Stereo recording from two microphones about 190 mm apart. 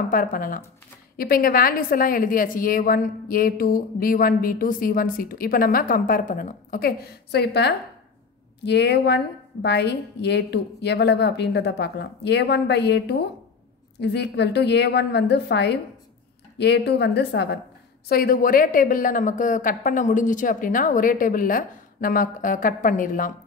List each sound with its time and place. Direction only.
0.1 s a woman's voice: 45° left (ahead or behind); by 17.6 s 65° left (ahead or behind)
18.0 s a woman's voice: 55° left (ahead or behind)